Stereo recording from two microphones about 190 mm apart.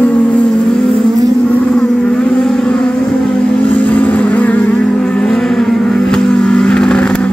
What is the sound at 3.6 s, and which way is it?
Music, 5° left (ahead or behind).